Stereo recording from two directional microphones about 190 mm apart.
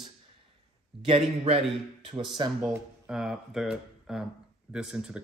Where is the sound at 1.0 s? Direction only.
30° right (ahead or behind).